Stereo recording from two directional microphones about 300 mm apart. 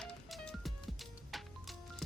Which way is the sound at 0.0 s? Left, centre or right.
Centre.